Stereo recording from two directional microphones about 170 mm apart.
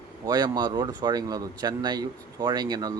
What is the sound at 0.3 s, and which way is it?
Speech, 25° right (ahead or behind).